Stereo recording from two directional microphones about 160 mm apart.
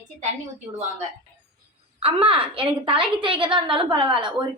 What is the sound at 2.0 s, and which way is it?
A woman's voice, 35° right (ahead or behind).